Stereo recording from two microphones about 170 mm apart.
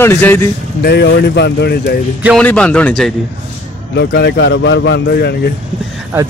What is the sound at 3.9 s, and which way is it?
A man's voice, 90° left.